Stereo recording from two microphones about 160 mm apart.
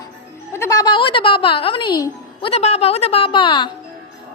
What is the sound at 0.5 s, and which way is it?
A woman's voice, 20° left (ahead or behind).